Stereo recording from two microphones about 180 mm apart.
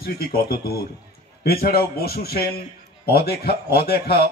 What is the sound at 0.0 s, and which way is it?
A man's voice, 60° left (ahead or behind).